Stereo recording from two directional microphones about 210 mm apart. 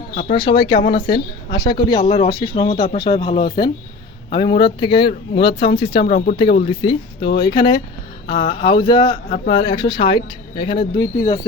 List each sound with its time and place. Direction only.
0.2 s speech: 25° left (ahead or behind)